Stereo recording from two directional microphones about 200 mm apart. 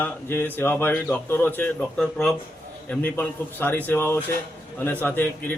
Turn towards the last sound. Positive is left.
turn(degrees=10)  # may be behind; listen again after turning